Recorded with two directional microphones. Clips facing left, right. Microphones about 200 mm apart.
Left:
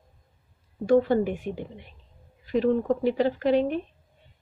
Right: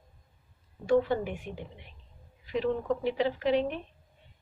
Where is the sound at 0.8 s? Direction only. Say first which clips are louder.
Left 5 dB; 45° left (ahead or behind).